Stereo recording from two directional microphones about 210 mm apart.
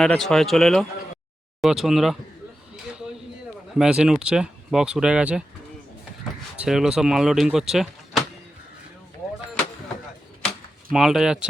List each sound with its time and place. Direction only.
0.0 s speech: centre (ahead or behind)
3.8 s speech: 5° right (ahead or behind)
6.6 s speech: 5° right (ahead or behind)
10.9 s speech: centre (ahead or behind)